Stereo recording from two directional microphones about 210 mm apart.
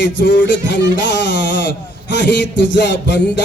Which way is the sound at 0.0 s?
55° left (ahead or behind).